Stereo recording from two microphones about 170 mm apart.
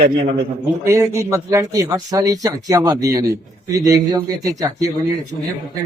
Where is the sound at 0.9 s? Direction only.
15° right (ahead or behind).